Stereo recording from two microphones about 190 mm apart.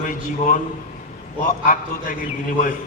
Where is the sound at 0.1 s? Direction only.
40° left (ahead or behind).